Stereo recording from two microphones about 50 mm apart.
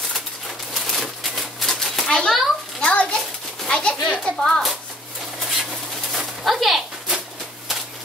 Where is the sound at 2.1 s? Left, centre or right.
Centre.